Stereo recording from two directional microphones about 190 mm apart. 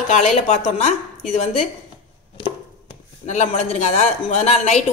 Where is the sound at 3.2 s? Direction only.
35° left (ahead or behind).